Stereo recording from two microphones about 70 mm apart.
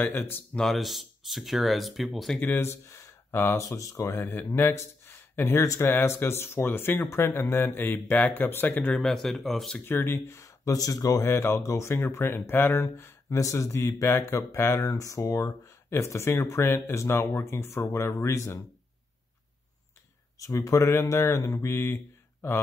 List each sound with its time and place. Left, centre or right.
0.1 s speech: left
0.6 s speech: centre
2.6 s speech: left
3.6 s speech: left
4.2 s a man's voice: left
8.9 s speech: centre
9.8 s speech: left
15.0 s speech: left
15.9 s speech: left
20.3 s speech: left